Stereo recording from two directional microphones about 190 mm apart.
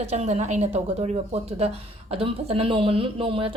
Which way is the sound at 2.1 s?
30° right (ahead or behind).